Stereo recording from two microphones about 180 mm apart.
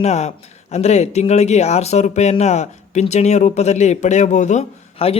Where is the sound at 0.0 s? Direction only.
40° left (ahead or behind).